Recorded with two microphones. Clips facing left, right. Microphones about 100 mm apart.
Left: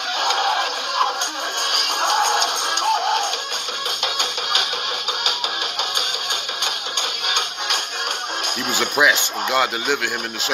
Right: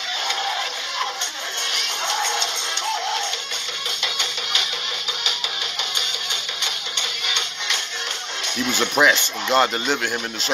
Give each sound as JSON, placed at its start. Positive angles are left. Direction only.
{"t": 0.2, "sound": "music", "side_deg": 60}
{"t": 6.6, "sound": "music", "side_deg": 55}
{"t": 8.7, "sound": "speech", "side_deg": 10}